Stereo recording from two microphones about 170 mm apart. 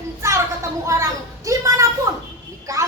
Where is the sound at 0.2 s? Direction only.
15° right (ahead or behind).